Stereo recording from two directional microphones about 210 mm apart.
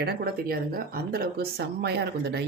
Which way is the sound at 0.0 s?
45° right (ahead or behind).